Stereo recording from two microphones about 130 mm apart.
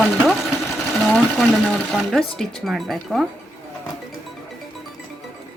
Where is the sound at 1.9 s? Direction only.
Centre (ahead or behind).